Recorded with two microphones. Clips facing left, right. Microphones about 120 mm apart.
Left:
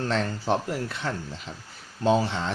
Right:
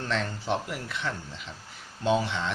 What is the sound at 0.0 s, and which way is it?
Speech, 35° left (ahead or behind).